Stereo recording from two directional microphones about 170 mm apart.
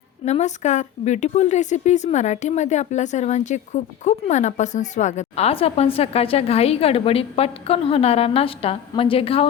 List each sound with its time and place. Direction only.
0.3 s a woman's voice: 40° left (ahead or behind)